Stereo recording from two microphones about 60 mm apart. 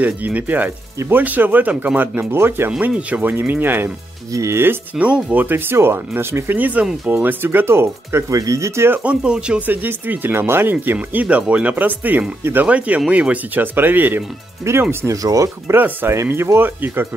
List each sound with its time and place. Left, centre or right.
0.0 s speech: right
2.3 s speech: right
3.1 s speech: right
4.3 s speech: right
4.9 s speech: right
6.5 s speech: right
8.3 s speech: right
9.0 s speech: centre
9.7 s speech: right
14.6 s speech: right
15.2 s speech: right
15.7 s speech: right